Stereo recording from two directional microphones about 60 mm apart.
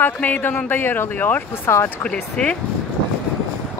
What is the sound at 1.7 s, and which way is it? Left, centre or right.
Speech, left.